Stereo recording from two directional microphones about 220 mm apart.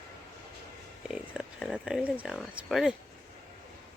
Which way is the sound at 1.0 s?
5° right (ahead or behind).